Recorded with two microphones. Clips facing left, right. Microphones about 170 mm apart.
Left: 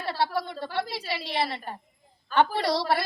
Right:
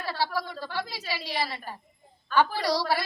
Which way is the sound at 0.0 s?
25° left (ahead or behind).